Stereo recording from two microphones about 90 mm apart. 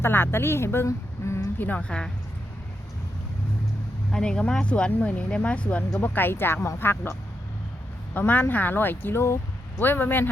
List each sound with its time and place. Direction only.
0.0 s a woman's voice: 25° left (ahead or behind)
1.6 s speech: 15° left (ahead or behind)
4.1 s speech: 10° left (ahead or behind)